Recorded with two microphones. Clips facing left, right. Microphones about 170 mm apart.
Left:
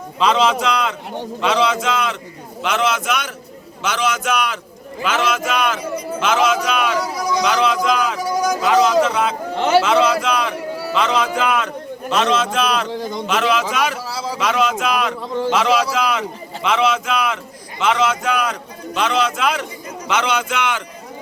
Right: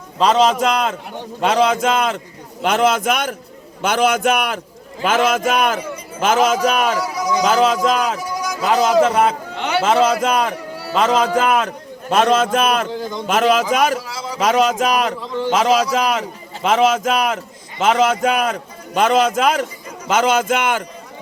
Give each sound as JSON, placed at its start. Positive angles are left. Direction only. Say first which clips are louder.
{"t": 0.2, "sound": "a man's voice", "louder": "right 2 dB", "side_deg": -40}